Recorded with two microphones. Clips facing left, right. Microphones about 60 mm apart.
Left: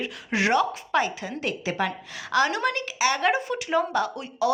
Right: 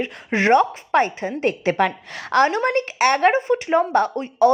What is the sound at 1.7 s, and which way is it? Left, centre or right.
Speech, right.